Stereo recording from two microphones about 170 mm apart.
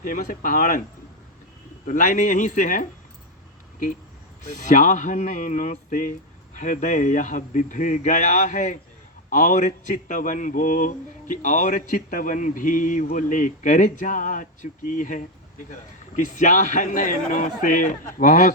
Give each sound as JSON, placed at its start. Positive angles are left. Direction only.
{"t": 0.0, "sound": "speech", "side_deg": 55}
{"t": 1.9, "sound": "speech", "side_deg": 50}
{"t": 4.4, "sound": "speech", "side_deg": 45}